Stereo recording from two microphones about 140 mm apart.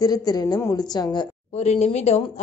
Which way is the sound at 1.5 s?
50° left (ahead or behind).